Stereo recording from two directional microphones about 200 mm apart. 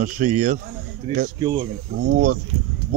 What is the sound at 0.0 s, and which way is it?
Speech, 40° right (ahead or behind).